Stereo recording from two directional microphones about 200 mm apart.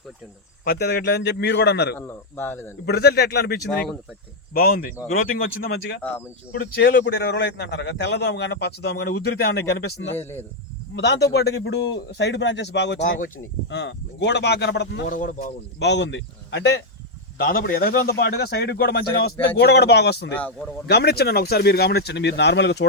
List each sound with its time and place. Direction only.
0.6 s a man's voice: 50° left (ahead or behind)
2.0 s speech: 10° left (ahead or behind)
2.8 s a man's voice: 55° left (ahead or behind)
6.0 s speech: 5° left (ahead or behind)
6.5 s a man's voice: 50° left (ahead or behind); by 10.2 s 65° left (ahead or behind)
10.2 s speech: 10° left (ahead or behind)
10.9 s a man's voice: 55° left (ahead or behind)
15.0 s speech: 40° left (ahead or behind)
15.8 s a man's voice: 60° left (ahead or behind)
17.3 s a man's voice: 45° left (ahead or behind)
20.3 s speech: 5° left (ahead or behind)
20.8 s a man's voice: 55° left (ahead or behind)